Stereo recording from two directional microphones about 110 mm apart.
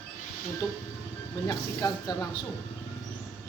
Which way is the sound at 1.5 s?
35° left (ahead or behind).